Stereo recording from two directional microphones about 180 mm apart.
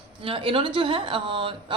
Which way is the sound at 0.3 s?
30° right (ahead or behind).